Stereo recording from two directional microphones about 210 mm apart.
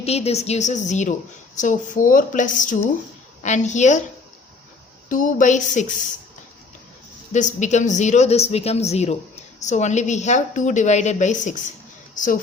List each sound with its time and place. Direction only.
0.0 s a woman's voice: 30° left (ahead or behind)
5.0 s a woman's voice: 40° left (ahead or behind)
7.3 s a woman's voice: 35° left (ahead or behind)